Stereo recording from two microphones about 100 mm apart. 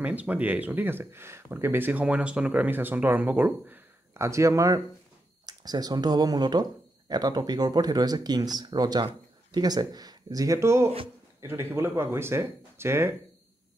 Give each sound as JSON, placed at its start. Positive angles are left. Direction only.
{"t": 0.0, "sound": "speech", "side_deg": -15}